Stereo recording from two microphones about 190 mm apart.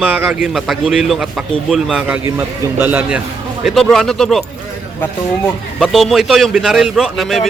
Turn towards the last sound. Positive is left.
turn(degrees=0)  # may be behind; listen again after turning